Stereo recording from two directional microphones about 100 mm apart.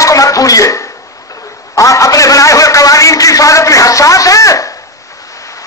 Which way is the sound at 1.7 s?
35° left (ahead or behind).